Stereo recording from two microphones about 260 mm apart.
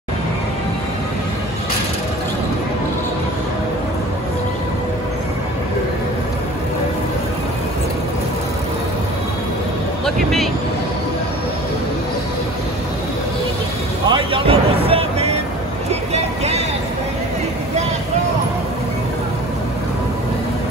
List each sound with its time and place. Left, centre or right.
10.0 s a sound: centre
14.0 s music: centre
15.9 s vehicle: right